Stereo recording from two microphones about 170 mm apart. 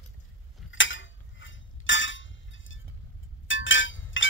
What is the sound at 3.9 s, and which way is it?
Wind chime, 90° left.